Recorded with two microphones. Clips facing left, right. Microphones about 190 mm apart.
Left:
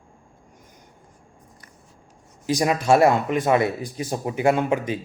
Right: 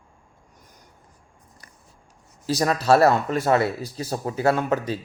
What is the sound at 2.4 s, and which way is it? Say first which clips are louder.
Speech: left 1 dB; 15° left (ahead or behind).